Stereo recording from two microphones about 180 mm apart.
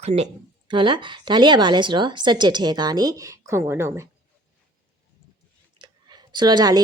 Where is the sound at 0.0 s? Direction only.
40° right (ahead or behind).